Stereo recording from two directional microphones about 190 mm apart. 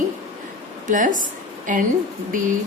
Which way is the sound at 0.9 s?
45° right (ahead or behind).